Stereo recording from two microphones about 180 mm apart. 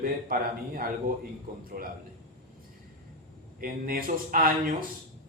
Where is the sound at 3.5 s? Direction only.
50° right (ahead or behind).